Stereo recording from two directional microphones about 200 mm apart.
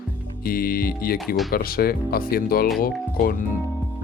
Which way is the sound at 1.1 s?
Centre (ahead or behind).